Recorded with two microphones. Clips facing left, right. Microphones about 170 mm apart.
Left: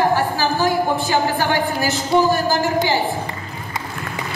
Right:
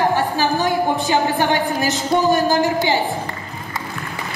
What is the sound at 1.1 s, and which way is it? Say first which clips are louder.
Speech: right 3 dB; 20° right (ahead or behind).